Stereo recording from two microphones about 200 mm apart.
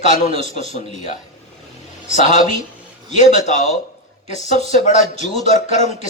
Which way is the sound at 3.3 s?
35° left (ahead or behind).